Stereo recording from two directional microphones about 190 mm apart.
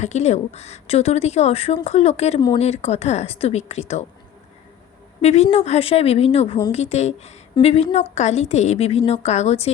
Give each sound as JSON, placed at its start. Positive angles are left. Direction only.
{"t": 0.0, "sound": "speech", "side_deg": 35}
{"t": 5.2, "sound": "speech", "side_deg": 35}